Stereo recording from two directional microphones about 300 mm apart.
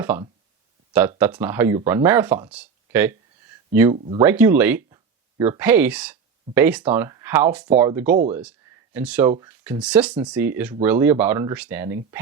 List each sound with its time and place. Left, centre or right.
0.0 s speech: centre
3.9 s speech: right
4.2 s speech: centre